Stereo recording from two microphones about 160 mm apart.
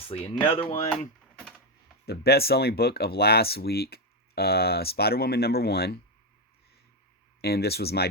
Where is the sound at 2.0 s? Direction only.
85° left.